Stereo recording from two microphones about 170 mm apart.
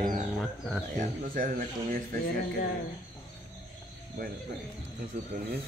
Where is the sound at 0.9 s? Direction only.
55° right (ahead or behind).